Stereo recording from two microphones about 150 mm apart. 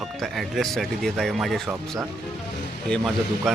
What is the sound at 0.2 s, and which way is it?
Speech, centre (ahead or behind).